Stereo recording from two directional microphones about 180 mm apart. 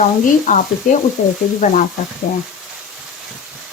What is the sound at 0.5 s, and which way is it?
Speech, 50° left (ahead or behind).